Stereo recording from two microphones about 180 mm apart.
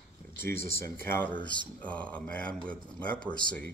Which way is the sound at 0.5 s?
55° right (ahead or behind).